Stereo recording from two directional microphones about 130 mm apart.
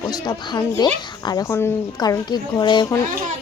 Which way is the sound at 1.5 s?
20° left (ahead or behind).